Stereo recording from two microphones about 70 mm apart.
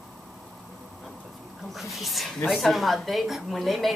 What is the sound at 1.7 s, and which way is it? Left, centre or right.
Speech, centre.